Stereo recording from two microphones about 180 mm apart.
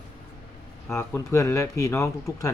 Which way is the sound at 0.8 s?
10° left (ahead or behind).